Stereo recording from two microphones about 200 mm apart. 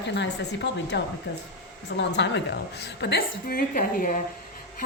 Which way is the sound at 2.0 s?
60° left (ahead or behind).